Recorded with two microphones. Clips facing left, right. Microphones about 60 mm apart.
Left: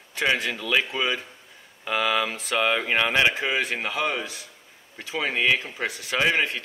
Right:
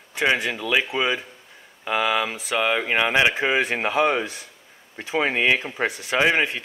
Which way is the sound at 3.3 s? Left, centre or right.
Right.